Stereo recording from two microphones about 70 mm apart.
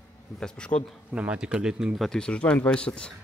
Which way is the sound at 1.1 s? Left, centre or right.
Centre.